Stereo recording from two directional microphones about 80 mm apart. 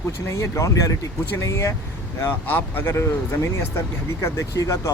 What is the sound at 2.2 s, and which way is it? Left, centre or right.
Speech, left.